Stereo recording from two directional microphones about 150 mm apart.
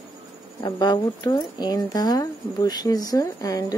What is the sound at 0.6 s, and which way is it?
Speech, 25° left (ahead or behind).